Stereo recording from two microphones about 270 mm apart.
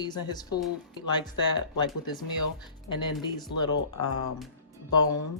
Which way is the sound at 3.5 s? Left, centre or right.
Left.